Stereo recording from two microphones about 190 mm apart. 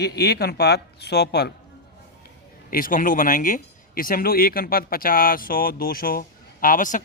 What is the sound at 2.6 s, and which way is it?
Speech, 45° left (ahead or behind).